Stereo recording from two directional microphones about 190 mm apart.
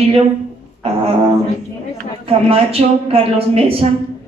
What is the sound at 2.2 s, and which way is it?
Speech, 30° right (ahead or behind).